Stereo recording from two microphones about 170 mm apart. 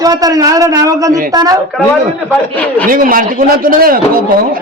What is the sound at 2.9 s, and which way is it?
A man's voice, 55° right (ahead or behind).